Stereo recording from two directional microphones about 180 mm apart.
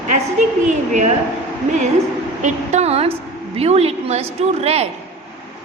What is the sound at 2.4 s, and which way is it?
A woman's voice, 40° right (ahead or behind).